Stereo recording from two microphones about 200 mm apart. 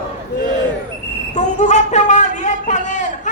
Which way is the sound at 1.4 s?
35° left (ahead or behind).